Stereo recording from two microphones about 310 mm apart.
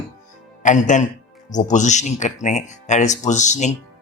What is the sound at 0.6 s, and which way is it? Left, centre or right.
Speech, left.